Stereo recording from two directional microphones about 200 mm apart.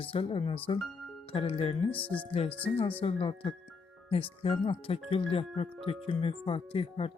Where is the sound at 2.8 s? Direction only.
25° left (ahead or behind).